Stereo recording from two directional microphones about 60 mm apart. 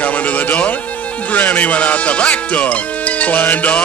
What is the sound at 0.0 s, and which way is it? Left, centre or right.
Speech, left.